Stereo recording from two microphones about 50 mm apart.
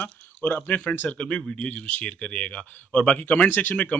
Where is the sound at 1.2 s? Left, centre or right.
Centre.